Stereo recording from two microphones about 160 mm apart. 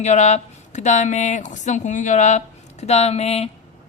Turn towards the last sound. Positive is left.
turn(degrees=40)  # may be behind; listen again after turning